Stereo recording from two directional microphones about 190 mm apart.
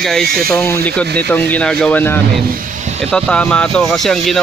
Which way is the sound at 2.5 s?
45° right (ahead or behind).